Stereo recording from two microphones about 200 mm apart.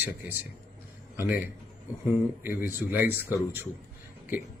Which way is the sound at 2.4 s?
45° left (ahead or behind).